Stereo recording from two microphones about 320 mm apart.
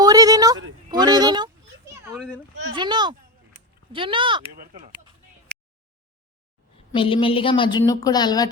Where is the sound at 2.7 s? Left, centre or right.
Centre.